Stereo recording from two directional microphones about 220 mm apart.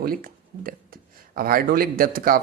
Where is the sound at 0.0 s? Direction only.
40° right (ahead or behind).